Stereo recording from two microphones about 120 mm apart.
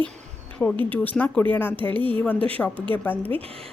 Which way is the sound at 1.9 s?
45° right (ahead or behind).